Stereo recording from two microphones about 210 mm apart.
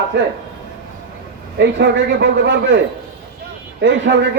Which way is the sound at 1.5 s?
55° right (ahead or behind).